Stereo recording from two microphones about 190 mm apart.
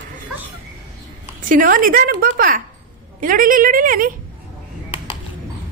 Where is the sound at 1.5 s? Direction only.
45° right (ahead or behind).